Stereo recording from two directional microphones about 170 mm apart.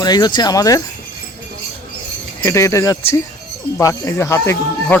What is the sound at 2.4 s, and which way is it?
Speech, 20° left (ahead or behind).